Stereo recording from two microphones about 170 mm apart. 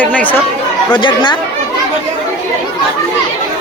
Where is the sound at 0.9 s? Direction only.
30° left (ahead or behind).